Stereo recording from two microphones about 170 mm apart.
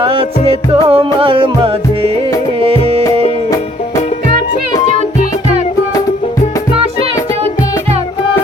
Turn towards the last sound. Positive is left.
turn(degrees=-35)  # may be behind; listen again after turning